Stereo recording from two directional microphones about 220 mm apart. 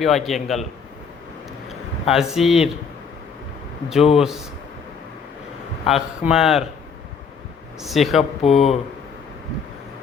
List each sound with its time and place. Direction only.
0.0 s speech: centre (ahead or behind)
2.0 s speech: centre (ahead or behind)
4.2 s speech: centre (ahead or behind)
5.8 s speech: centre (ahead or behind)
7.8 s speech: centre (ahead or behind)
8.4 s speech: 30° left (ahead or behind)